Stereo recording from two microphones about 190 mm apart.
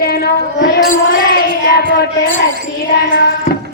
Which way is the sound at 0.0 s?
55° left (ahead or behind).